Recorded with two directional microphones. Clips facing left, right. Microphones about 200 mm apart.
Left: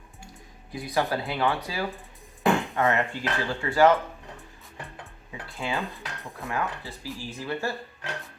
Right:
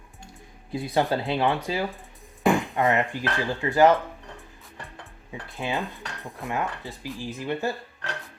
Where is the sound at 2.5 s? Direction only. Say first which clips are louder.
Right 2 dB; 15° right (ahead or behind).